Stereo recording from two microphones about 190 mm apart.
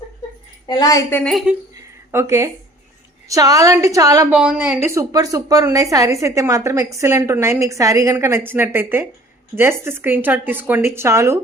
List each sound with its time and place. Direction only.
0.7 s a woman's voice: 20° left (ahead or behind)
1.2 s a woman's voice: centre (ahead or behind)
2.1 s a woman's voice: 15° right (ahead or behind)
4.4 s a woman's voice: 5° right (ahead or behind)